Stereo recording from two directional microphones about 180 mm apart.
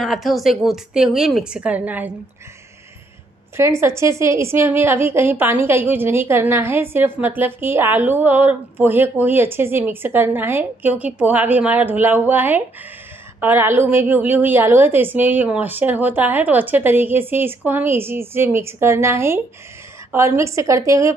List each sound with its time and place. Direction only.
0.0 s a woman's voice: centre (ahead or behind)
3.5 s a woman's voice: 15° right (ahead or behind)